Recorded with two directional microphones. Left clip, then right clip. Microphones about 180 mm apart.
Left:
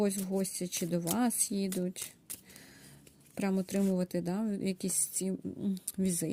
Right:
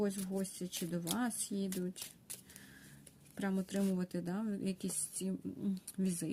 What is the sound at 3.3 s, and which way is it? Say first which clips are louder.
Speech: left 6 dB; 40° left (ahead or behind).